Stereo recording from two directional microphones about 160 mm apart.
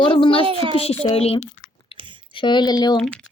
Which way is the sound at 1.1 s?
40° left (ahead or behind).